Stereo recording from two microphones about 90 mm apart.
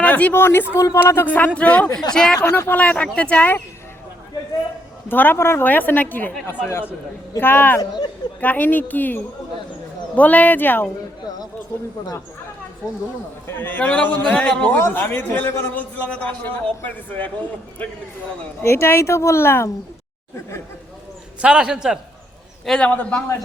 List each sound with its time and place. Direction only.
0.0 s speech: 15° left (ahead or behind); by 1.2 s 35° left (ahead or behind)
1.2 s a man's voice: 20° left (ahead or behind)
2.5 s a man's voice: 25° left (ahead or behind)
5.0 s a man's voice: 20° left (ahead or behind)
13.6 s a man's voice: 20° left (ahead or behind)
14.8 s a man's voice: 25° left (ahead or behind)
18.6 s a man's voice: 30° left (ahead or behind)
21.4 s a man's voice: 10° right (ahead or behind)
22.6 s a man's voice: 5° left (ahead or behind)